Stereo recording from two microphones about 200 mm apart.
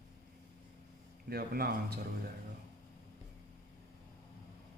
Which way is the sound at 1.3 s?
50° right (ahead or behind).